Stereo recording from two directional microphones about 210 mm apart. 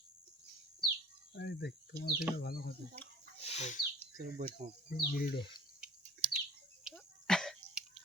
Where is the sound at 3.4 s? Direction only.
30° left (ahead or behind).